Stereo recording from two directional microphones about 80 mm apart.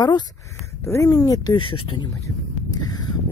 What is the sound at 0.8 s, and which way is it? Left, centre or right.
Speech, left.